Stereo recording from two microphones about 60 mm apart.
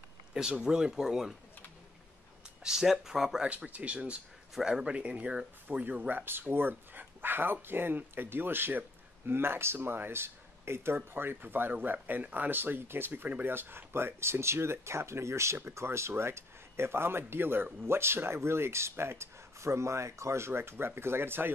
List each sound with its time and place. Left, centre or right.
0.3 s speech: centre
2.6 s speech: centre
3.4 s speech: right
4.6 s speech: centre
4.8 s speech: centre; by 21.5 s right